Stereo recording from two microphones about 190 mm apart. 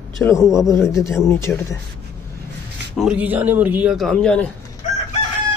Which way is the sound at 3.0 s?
5° right (ahead or behind).